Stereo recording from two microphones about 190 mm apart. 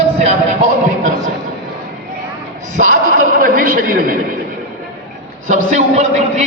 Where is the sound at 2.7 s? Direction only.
40° right (ahead or behind).